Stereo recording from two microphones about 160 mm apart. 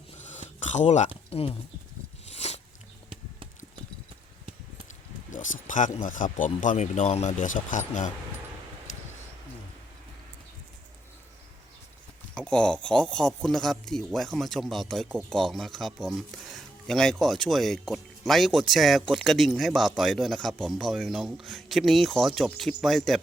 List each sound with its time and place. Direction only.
0.2 s a sound: 50° left (ahead or behind)
2.3 s biting: 40° left (ahead or behind)
5.3 s speech: 55° left (ahead or behind)
12.3 s speech: 5° left (ahead or behind)